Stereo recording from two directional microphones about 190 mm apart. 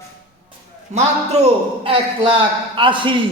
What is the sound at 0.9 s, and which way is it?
A man's voice, 35° right (ahead or behind).